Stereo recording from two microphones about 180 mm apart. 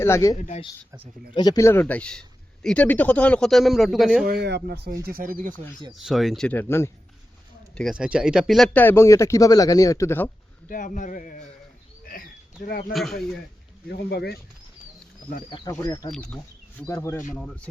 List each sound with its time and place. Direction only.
0.0 s speech: 15° left (ahead or behind)
0.3 s a man's voice: 40° left (ahead or behind)
1.3 s speech: 25° left (ahead or behind); by 4.3 s centre (ahead or behind)
4.3 s speech: 65° right (ahead or behind)
5.0 s speech: 55° right (ahead or behind)
5.9 s speech: centre (ahead or behind)
7.8 s speech: centre (ahead or behind); by 10.2 s 15° left (ahead or behind)
10.7 s a man's voice: 45° left (ahead or behind)
12.0 s a sound: 50° left (ahead or behind)
12.9 s speech: centre (ahead or behind)
13.8 s speech: 65° left (ahead or behind)
15.4 s speech: 25° left (ahead or behind)